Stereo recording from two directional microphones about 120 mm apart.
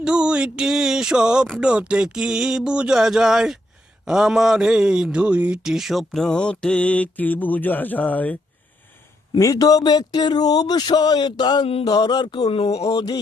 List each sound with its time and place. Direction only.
0.0 s speech: 5° right (ahead or behind)
6.1 s mantra: 5° left (ahead or behind)
9.4 s speech: 30° left (ahead or behind)
11.6 s a sound: 55° left (ahead or behind)
11.9 s speech: 35° left (ahead or behind); by 12.9 s 60° left (ahead or behind)
12.9 s speech: 35° left (ahead or behind)